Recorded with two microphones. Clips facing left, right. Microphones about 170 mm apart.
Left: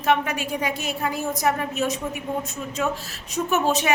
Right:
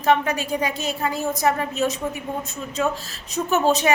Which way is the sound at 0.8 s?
10° left (ahead or behind).